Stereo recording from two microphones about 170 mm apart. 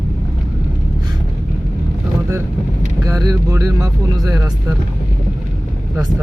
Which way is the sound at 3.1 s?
20° right (ahead or behind).